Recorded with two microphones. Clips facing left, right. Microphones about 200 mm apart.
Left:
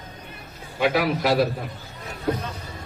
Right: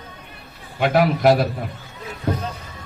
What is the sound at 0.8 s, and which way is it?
Speech, 50° right (ahead or behind).